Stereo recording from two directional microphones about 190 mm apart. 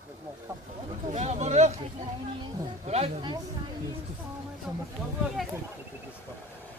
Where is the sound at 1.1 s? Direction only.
35° right (ahead or behind).